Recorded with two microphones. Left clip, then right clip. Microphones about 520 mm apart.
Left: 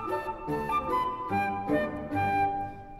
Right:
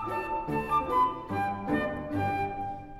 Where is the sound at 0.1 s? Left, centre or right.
Centre.